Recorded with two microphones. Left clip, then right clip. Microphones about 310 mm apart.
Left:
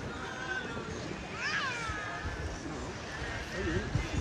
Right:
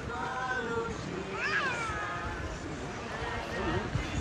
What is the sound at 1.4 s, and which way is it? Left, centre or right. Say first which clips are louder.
Cat: right 3 dB; centre.